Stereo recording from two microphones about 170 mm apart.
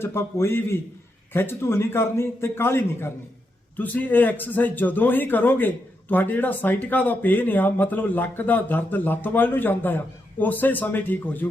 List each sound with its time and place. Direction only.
0.0 s a man's voice: 15° left (ahead or behind)